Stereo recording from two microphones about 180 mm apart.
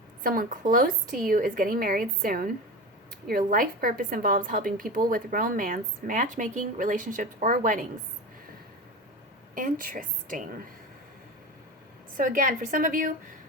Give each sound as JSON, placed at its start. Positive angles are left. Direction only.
{"t": 0.2, "sound": "a woman's voice", "side_deg": -50}
{"t": 9.6, "sound": "a woman's voice", "side_deg": -50}
{"t": 12.1, "sound": "a woman's voice", "side_deg": -50}